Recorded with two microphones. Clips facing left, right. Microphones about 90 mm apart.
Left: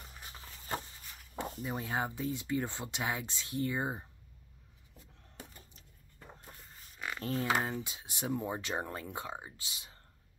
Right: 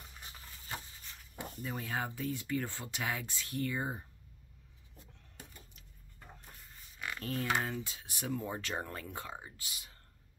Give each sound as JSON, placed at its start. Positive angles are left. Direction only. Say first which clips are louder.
{"t": 1.4, "sound": "speech", "louder": "left 3 dB", "side_deg": 20}
{"t": 5.4, "sound": "typewriter", "louder": "left 3 dB", "side_deg": 30}
{"t": 7.2, "sound": "speech", "louder": "left 2 dB", "side_deg": 25}